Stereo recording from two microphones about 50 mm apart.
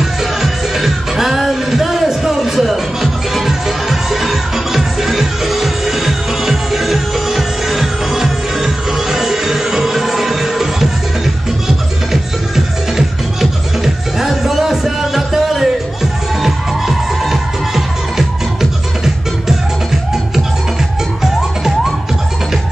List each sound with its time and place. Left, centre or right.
0.0 s music: centre